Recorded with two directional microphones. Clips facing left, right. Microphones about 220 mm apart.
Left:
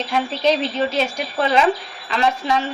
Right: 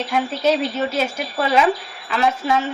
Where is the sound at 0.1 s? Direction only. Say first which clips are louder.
Even; 5° right (ahead or behind).